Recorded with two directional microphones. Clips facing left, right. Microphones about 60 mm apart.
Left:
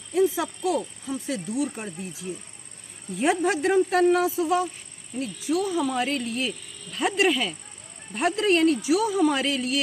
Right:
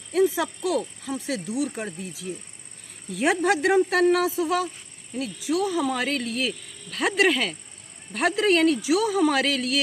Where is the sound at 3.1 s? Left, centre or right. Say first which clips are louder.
Right 1 dB; right.